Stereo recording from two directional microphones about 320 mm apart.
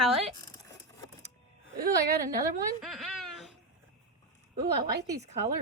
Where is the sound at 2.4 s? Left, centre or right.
Centre.